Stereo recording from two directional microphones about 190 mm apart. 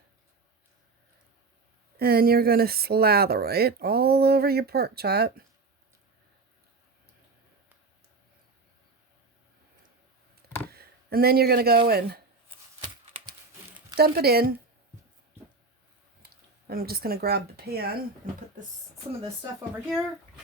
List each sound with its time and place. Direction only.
2.0 s speech: 55° right (ahead or behind)
10.7 s a sound: 55° right (ahead or behind)
11.9 s speech: 55° right (ahead or behind)
13.9 s speech: 55° right (ahead or behind)
16.6 s speech: 55° right (ahead or behind)